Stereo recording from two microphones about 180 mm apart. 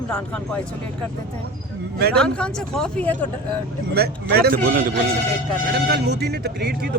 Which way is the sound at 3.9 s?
60° right (ahead or behind).